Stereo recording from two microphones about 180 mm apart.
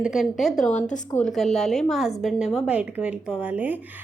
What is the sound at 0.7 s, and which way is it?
Speech, 45° left (ahead or behind).